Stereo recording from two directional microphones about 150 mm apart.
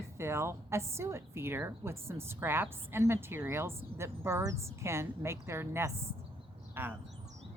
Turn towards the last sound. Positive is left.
turn(degrees=-15)  # may be behind; listen again after turning